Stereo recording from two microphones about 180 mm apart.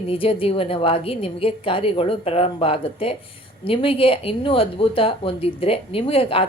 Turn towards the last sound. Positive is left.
turn(degrees=30)  # may be behind; listen again after turning